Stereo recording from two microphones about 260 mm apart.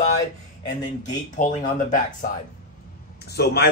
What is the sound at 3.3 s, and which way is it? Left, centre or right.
Speech, left.